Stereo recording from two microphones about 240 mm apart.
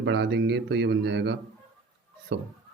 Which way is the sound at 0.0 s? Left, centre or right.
Right.